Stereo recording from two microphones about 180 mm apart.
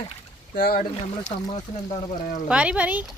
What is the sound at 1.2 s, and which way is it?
Speech, 25° left (ahead or behind).